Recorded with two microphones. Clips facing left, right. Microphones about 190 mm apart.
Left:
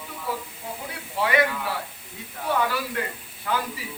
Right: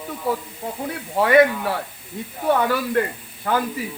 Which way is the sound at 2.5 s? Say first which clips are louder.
Right 6 dB; 50° right (ahead or behind).